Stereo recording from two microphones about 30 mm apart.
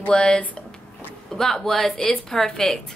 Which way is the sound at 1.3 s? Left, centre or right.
Centre.